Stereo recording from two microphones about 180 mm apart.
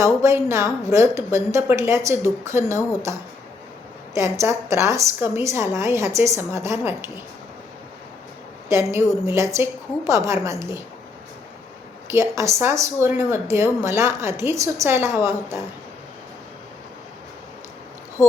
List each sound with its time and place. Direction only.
0.0 s a woman's voice: 15° right (ahead or behind)
4.1 s a woman's voice: 15° right (ahead or behind)
8.9 s a woman's voice: 15° right (ahead or behind)
12.1 s a woman's voice: 15° right (ahead or behind)